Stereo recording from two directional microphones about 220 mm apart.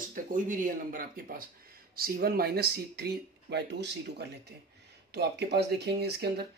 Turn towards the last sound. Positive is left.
turn(degrees=-45)  # may be behind; listen again after turning